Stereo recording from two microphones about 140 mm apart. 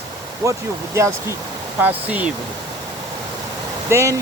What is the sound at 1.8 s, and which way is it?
Speech, 10° right (ahead or behind).